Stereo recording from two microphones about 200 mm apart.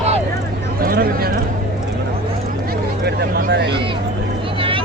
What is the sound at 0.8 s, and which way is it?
Speech, 50° right (ahead or behind).